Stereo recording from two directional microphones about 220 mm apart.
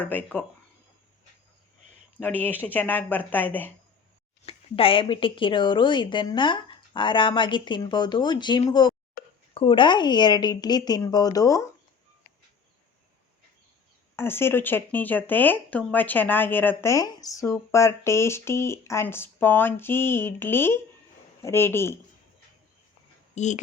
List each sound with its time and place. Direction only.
0.0 s speech: 10° left (ahead or behind)
2.1 s speech: 10° left (ahead or behind)
4.4 s speech: 25° left (ahead or behind)
9.2 s a sound: 45° left (ahead or behind)
9.6 s speech: 20° left (ahead or behind)
14.2 s speech: 10° left (ahead or behind)
23.3 s speech: 30° left (ahead or behind)